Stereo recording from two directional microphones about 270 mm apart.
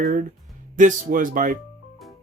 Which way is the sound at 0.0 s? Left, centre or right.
Right.